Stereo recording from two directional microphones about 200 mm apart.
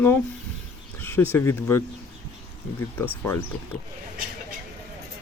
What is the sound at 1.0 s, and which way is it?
Speech, 10° left (ahead or behind).